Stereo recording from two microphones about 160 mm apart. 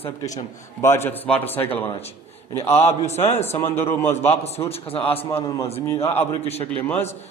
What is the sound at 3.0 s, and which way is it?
Speech, 45° left (ahead or behind).